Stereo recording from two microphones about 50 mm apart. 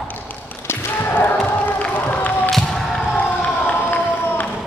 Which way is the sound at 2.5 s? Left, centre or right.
Centre.